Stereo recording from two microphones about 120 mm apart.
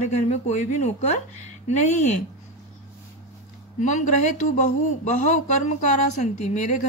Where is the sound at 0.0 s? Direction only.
75° left (ahead or behind).